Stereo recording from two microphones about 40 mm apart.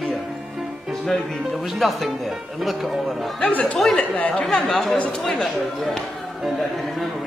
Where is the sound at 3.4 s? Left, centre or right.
Left.